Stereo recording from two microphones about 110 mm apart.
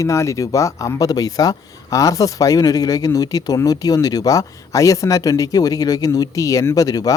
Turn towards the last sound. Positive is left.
turn(degrees=35)  # may be behind; listen again after turning